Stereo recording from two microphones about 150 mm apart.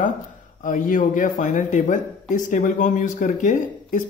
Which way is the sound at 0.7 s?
60° left (ahead or behind).